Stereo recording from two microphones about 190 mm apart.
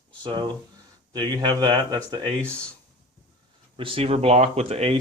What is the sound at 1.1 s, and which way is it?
Speech, 20° right (ahead or behind).